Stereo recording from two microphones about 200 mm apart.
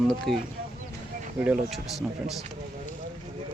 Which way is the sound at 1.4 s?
5° right (ahead or behind).